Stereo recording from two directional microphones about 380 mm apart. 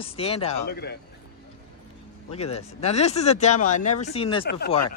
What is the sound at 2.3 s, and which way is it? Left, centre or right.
Speech, centre.